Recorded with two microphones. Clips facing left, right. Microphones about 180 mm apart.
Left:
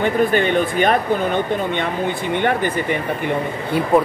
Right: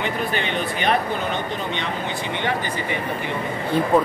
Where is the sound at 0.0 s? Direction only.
50° left (ahead or behind).